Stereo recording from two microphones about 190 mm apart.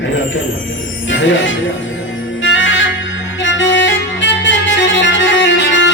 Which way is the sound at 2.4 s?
80° left.